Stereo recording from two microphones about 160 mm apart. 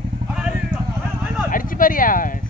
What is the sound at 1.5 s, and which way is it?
Speech, 60° left (ahead or behind).